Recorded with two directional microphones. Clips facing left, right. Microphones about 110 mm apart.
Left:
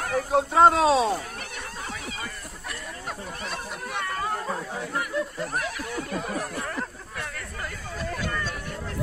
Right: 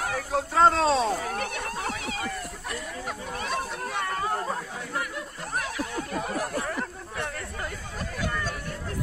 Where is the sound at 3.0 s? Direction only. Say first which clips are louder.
Right 2 dB; centre (ahead or behind).